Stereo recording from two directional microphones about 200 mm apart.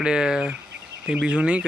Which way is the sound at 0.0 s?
5° right (ahead or behind).